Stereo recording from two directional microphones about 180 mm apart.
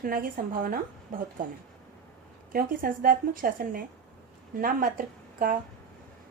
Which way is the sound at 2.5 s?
50° right (ahead or behind).